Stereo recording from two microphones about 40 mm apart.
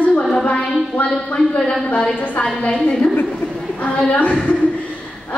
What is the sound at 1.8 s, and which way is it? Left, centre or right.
Speech, left.